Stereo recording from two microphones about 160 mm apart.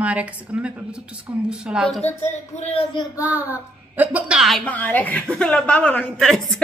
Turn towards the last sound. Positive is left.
turn(degrees=0)  # may be behind; listen again after turning